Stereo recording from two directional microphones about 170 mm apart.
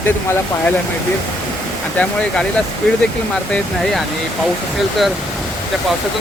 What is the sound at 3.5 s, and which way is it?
Speech, centre (ahead or behind).